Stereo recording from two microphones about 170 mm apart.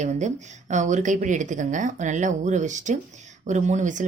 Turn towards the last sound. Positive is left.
turn(degrees=-45)  # may be behind; listen again after turning